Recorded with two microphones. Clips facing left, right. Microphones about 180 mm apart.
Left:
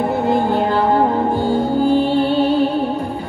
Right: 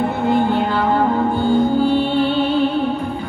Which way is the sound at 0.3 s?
40° left (ahead or behind).